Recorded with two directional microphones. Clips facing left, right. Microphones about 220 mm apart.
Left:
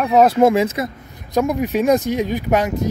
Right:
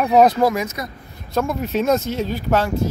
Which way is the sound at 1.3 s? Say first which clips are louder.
Left 3 dB; 15° left (ahead or behind).